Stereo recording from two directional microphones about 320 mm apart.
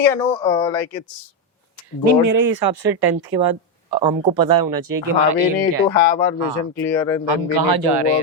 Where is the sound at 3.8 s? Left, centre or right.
Centre.